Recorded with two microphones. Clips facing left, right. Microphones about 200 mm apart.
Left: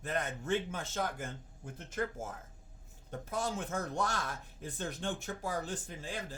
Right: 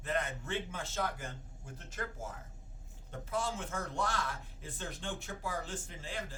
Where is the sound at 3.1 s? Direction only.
40° left (ahead or behind).